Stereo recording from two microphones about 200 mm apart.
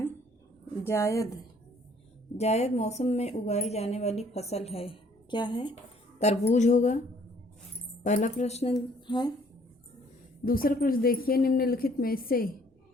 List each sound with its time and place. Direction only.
0.9 s a woman's voice: 15° left (ahead or behind)
2.4 s speech: 35° left (ahead or behind)
8.0 s speech: 35° left (ahead or behind)
8.7 s speech: 20° left (ahead or behind)
10.4 s speech: 45° left (ahead or behind)